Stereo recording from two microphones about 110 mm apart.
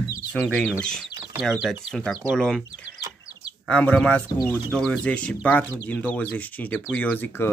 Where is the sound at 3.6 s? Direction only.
10° left (ahead or behind).